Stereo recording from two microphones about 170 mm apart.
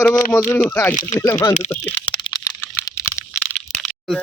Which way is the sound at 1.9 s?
25° left (ahead or behind).